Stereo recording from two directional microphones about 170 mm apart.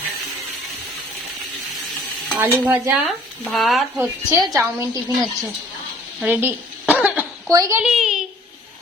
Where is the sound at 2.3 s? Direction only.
15° right (ahead or behind).